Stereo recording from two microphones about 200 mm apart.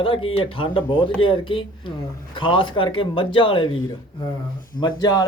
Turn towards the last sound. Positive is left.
turn(degrees=20)  # may be behind; listen again after turning